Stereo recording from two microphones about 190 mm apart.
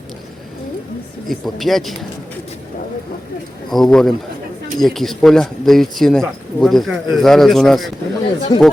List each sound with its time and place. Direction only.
1.3 s speech: centre (ahead or behind)
3.7 s speech: centre (ahead or behind)
8.2 s speech: 25° left (ahead or behind)